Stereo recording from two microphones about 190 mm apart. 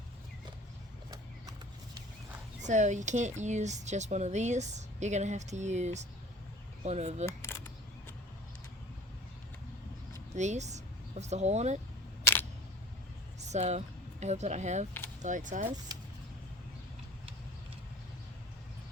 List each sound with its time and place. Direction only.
2.6 s speech: 40° right (ahead or behind)
7.3 s camera: 10° left (ahead or behind)
10.3 s speech: 35° right (ahead or behind)
12.2 s single-lens reflex camera: 10° left (ahead or behind)
13.5 s speech: 35° right (ahead or behind)